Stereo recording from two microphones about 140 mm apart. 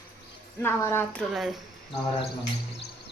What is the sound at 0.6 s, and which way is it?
Speech, 15° left (ahead or behind).